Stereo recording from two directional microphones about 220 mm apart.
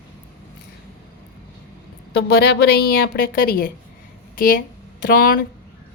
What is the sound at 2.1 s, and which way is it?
A woman's voice, 45° left (ahead or behind).